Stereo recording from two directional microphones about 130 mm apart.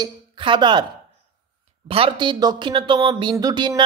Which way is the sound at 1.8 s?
45° right (ahead or behind).